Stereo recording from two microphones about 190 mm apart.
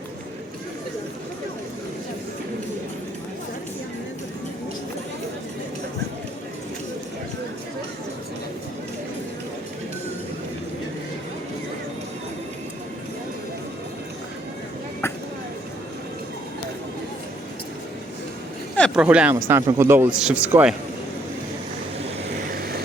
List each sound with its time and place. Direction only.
18.9 s speech: 5° right (ahead or behind)
22.4 s vehicle: 50° right (ahead or behind)